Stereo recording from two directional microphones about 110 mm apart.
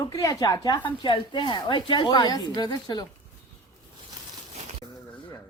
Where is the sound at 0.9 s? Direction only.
50° left (ahead or behind).